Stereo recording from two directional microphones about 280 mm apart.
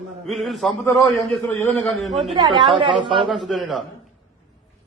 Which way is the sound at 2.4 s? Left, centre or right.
Centre.